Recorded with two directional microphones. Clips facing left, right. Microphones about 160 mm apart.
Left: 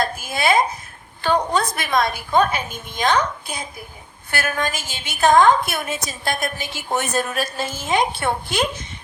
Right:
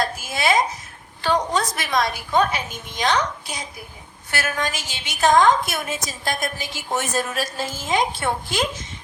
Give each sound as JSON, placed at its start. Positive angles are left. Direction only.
{"t": 0.0, "sound": "babbling", "side_deg": 55}
{"t": 1.2, "sound": "a woman's voice", "side_deg": 55}